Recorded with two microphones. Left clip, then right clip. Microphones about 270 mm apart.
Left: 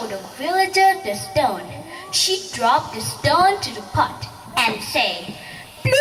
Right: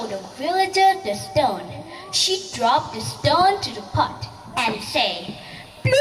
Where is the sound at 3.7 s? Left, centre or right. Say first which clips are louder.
Left 2 dB; centre.